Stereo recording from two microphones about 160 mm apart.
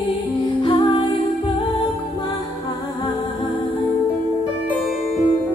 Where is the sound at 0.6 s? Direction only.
30° left (ahead or behind).